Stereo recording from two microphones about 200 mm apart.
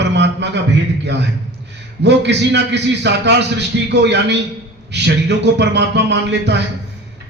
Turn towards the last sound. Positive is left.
turn(degrees=-60)  # may be behind; listen again after turning